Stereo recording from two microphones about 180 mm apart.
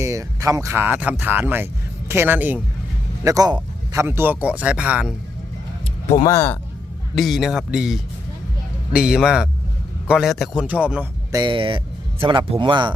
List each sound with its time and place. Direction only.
0.0 s speech: 20° right (ahead or behind)
3.2 s speech: 20° right (ahead or behind)
6.2 s speech: 15° left (ahead or behind)
7.2 s speech: centre (ahead or behind)
11.3 s speech: 25° right (ahead or behind)